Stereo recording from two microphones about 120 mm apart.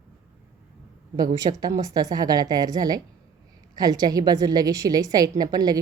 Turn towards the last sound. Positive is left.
turn(degrees=-30)  # may be behind; listen again after turning